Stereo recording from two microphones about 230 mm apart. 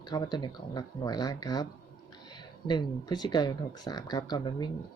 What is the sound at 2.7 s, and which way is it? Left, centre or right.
Speech, centre.